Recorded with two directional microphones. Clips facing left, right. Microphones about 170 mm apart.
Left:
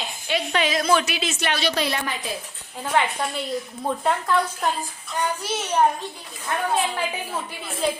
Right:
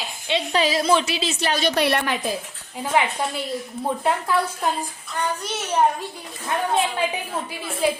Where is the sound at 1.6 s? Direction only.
60° right (ahead or behind).